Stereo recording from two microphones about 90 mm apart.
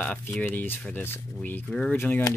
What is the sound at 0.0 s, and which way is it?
Speech, 15° left (ahead or behind).